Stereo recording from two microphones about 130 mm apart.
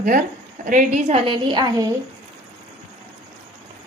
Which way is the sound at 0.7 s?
80° right.